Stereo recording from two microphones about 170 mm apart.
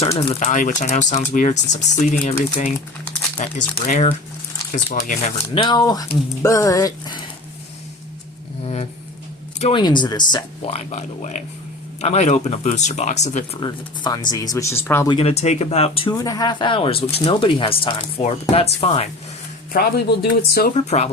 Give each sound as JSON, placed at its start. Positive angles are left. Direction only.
{"t": 0.0, "sound": "speech", "side_deg": 35}
{"t": 0.4, "sound": "speech", "side_deg": 50}
{"t": 5.6, "sound": "speech", "side_deg": 25}
{"t": 8.6, "sound": "a sound", "side_deg": 40}
{"t": 9.6, "sound": "speech", "side_deg": 30}
{"t": 13.6, "sound": "speech", "side_deg": 25}
{"t": 15.1, "sound": "speech", "side_deg": 35}
{"t": 16.1, "sound": "speech", "side_deg": 20}
{"t": 19.7, "sound": "speech", "side_deg": 70}
{"t": 20.7, "sound": "speech", "side_deg": 40}